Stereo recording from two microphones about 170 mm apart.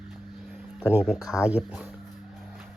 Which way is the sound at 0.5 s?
10° right (ahead or behind).